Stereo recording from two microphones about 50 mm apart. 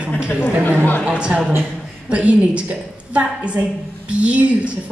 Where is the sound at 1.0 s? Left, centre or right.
Right.